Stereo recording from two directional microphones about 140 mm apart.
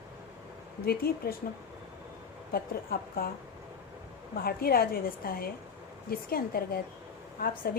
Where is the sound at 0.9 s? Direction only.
90° left.